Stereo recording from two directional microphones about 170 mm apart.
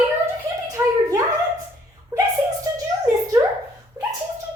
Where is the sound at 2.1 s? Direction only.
25° right (ahead or behind).